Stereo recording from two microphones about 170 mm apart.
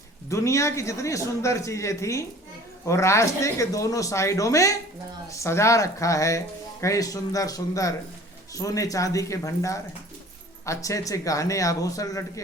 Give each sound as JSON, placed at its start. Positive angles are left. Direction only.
{"t": 0.3, "sound": "a man's voice", "side_deg": 15}